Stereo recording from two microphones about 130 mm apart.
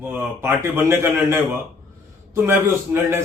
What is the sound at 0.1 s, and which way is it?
A man's voice, 15° right (ahead or behind).